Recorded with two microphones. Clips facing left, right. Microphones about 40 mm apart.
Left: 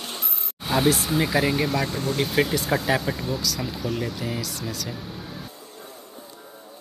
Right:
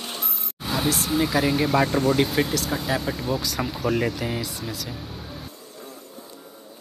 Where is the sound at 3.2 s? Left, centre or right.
Right.